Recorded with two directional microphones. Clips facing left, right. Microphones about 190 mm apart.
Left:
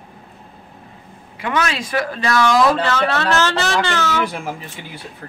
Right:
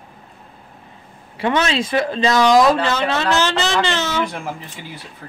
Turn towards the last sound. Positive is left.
turn(degrees=-20)  # may be behind; listen again after turning